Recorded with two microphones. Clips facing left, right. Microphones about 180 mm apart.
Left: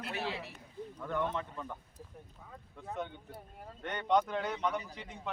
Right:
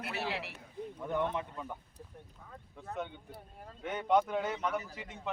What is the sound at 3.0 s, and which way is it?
Speech, 5° right (ahead or behind).